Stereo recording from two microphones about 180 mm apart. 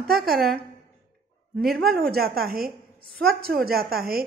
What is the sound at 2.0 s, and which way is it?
A woman's voice, 60° right (ahead or behind).